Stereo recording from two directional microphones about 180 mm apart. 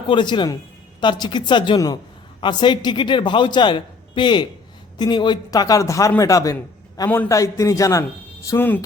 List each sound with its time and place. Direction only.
0.1 s a man's voice: 25° left (ahead or behind)